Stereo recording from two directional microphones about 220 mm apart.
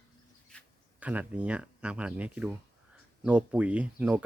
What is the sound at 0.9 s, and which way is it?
Speech, 5° right (ahead or behind).